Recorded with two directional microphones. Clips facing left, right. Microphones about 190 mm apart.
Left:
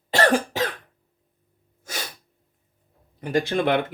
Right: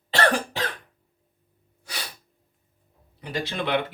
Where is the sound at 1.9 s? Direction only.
45° left (ahead or behind).